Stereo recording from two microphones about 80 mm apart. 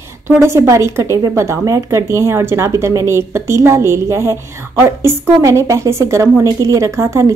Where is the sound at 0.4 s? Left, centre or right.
Right.